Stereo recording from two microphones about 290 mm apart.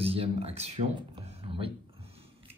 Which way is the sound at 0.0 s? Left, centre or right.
Centre.